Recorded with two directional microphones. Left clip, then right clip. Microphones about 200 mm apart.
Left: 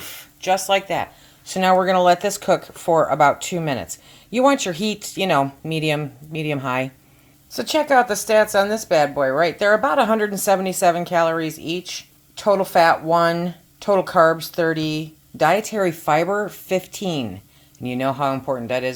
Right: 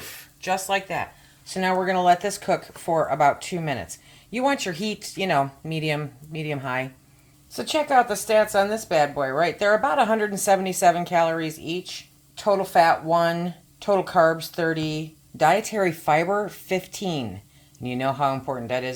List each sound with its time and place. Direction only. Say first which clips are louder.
0.0 s a sound: left 6 dB; 50° left (ahead or behind)
1.5 s speech: left 7 dB; 40° left (ahead or behind)
7.5 s a woman's voice: left 3 dB; 20° left (ahead or behind)